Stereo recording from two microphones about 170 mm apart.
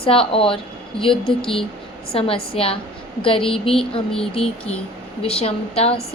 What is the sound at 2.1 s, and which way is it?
A woman's voice, 35° left (ahead or behind).